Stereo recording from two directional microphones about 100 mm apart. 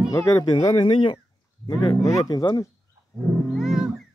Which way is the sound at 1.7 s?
45° left (ahead or behind).